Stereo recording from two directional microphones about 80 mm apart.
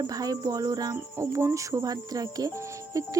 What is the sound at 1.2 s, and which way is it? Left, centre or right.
Music, right.